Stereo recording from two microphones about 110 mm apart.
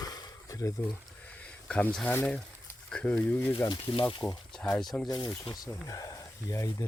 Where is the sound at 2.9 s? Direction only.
10° left (ahead or behind).